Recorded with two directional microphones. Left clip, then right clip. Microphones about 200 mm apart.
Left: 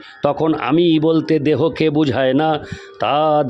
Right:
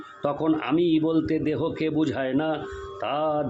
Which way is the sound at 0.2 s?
50° left (ahead or behind).